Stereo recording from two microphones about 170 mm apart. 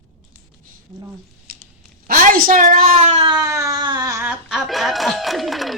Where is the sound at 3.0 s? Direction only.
35° right (ahead or behind).